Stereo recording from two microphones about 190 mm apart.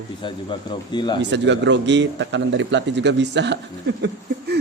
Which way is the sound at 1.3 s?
70° right (ahead or behind).